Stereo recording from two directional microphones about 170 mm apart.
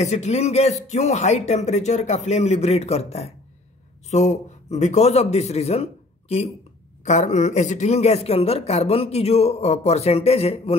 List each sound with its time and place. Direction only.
0.0 s speech: 40° left (ahead or behind)